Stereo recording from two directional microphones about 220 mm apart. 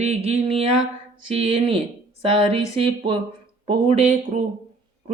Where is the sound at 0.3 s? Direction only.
25° right (ahead or behind).